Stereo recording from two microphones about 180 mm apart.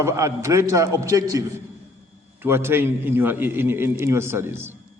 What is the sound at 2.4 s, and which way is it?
A man's voice, 15° right (ahead or behind).